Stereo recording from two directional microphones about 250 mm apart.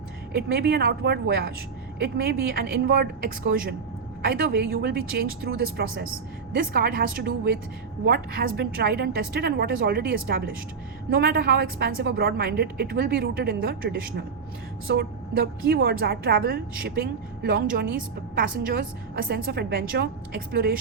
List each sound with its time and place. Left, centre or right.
0.3 s a woman's voice: right